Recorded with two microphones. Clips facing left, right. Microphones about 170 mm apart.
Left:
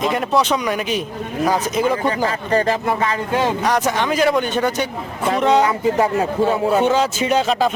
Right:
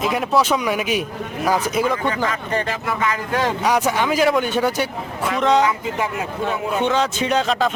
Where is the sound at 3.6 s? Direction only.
10° right (ahead or behind).